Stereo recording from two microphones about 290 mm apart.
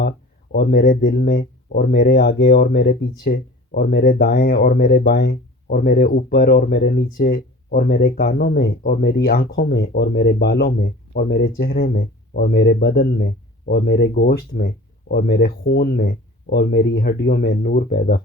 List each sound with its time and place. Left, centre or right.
0.5 s speech: left